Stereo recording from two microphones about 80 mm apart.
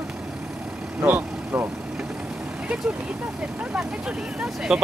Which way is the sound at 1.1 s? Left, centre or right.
Right.